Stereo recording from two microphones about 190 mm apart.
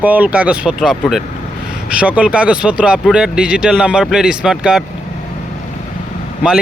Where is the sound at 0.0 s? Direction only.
10° right (ahead or behind).